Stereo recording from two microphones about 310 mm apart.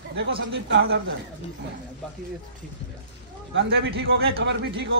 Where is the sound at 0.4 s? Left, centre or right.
Right.